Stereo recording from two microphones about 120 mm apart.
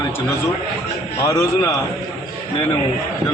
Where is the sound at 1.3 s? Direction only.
25° left (ahead or behind).